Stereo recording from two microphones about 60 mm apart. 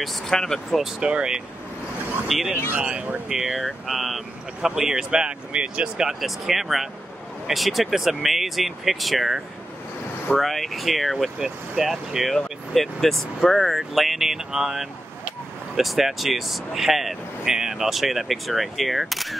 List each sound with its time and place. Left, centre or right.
0.0 s speech: centre
0.8 s speech: centre
2.7 s speech: right
3.5 s speech: centre
6.2 s speech: centre